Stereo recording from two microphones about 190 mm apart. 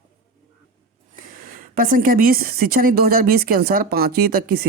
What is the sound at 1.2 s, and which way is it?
Speech, 45° right (ahead or behind).